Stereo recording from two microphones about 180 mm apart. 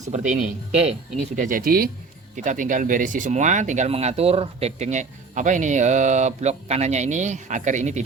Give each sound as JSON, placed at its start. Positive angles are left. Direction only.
{"t": 0.3, "sound": "speech", "side_deg": -45}
{"t": 1.4, "sound": "speech", "side_deg": -50}